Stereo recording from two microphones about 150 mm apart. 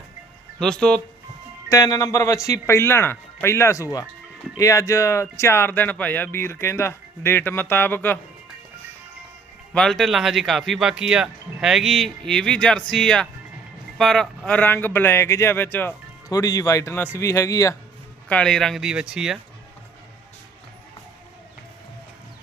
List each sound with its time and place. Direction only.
0.6 s speech: 5° left (ahead or behind)
1.7 s speech: 20° left (ahead or behind)
9.7 s speech: 5° left (ahead or behind)
16.3 s speech: 25° left (ahead or behind)
18.3 s speech: 5° left (ahead or behind)